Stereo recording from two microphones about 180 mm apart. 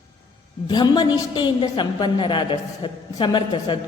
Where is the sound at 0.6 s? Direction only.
25° left (ahead or behind).